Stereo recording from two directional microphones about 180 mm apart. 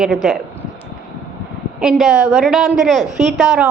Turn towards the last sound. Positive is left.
turn(degrees=0)  # may be behind; listen again after turning